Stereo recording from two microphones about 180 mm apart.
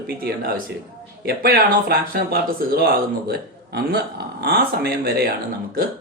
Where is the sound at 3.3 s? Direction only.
60° right (ahead or behind).